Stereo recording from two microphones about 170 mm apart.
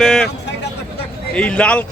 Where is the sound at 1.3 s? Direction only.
5° left (ahead or behind).